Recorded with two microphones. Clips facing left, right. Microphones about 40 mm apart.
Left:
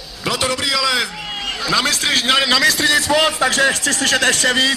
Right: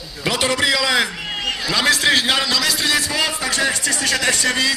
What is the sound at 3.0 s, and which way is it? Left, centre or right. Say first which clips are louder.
A man's voice: left 6 dB; left.